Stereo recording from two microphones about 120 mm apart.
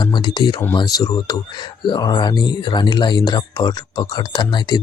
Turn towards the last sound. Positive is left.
turn(degrees=40)  # may be behind; listen again after turning